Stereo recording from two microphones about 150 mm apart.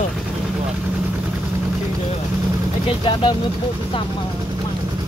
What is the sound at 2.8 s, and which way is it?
Speech, 35° left (ahead or behind).